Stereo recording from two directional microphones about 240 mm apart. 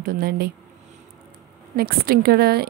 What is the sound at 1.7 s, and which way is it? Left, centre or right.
Speech, right.